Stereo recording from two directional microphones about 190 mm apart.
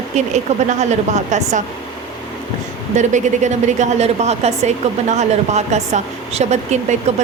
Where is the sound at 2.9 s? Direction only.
40° right (ahead or behind).